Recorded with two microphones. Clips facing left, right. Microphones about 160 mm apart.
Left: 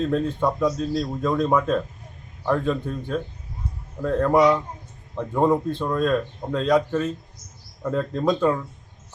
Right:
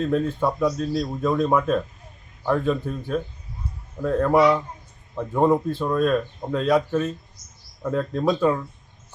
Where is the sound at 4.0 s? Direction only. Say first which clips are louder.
Even; 5° right (ahead or behind).